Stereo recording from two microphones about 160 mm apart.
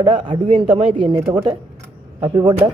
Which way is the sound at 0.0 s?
30° right (ahead or behind).